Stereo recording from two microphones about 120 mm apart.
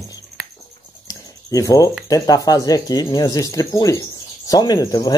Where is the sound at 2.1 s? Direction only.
30° left (ahead or behind).